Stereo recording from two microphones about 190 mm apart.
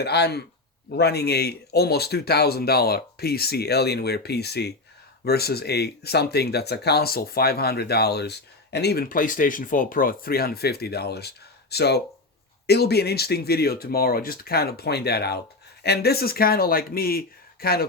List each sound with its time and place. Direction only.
0.0 s speech: 60° left (ahead or behind)